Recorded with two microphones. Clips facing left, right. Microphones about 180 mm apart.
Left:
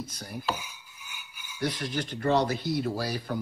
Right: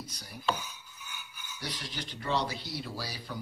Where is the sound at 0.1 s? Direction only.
50° left (ahead or behind).